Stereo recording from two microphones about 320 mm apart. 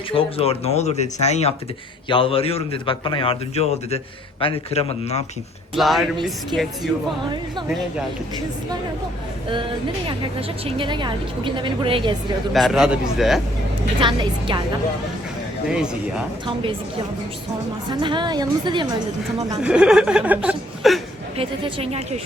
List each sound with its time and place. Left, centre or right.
0.1 s a man's voice: centre
5.7 s a man's voice: centre
10.7 s a woman's voice: centre
12.5 s a man's voice: centre
14.0 s a woman's voice: centre
18.0 s a woman's voice: centre
19.6 s speech: centre
21.3 s a woman's voice: centre